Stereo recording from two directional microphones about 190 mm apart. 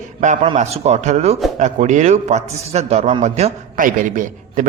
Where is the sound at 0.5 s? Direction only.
40° right (ahead or behind).